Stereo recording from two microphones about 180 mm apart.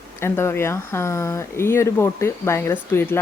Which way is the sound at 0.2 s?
15° left (ahead or behind).